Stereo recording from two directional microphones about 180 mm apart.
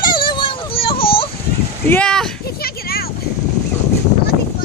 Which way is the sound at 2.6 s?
55° left (ahead or behind).